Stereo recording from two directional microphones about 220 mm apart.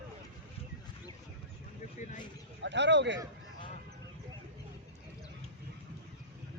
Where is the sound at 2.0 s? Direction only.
35° left (ahead or behind).